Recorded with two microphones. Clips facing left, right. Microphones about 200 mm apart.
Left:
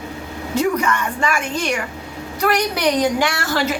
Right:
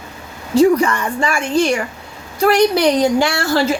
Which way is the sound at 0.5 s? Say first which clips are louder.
Right 7 dB; 30° right (ahead or behind).